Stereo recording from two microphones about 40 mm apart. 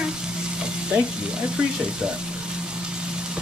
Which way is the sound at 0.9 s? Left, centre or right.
Right.